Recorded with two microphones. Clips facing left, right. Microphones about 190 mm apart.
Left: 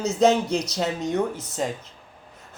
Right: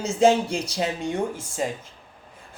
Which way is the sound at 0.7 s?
10° right (ahead or behind).